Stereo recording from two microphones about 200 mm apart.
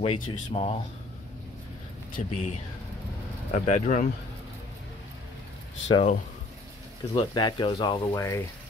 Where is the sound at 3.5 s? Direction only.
40° left (ahead or behind).